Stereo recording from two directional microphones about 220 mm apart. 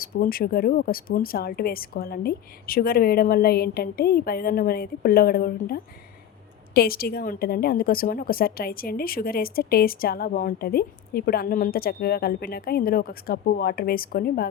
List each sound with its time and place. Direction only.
0.0 s a woman's voice: 40° left (ahead or behind)